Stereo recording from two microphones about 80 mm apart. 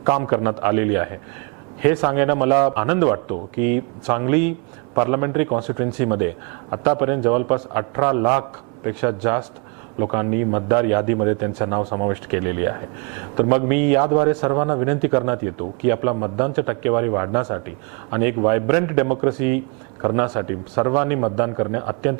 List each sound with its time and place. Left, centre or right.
0.1 s a man's voice: right